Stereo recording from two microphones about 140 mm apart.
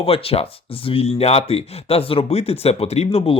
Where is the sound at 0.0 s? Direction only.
45° left (ahead or behind).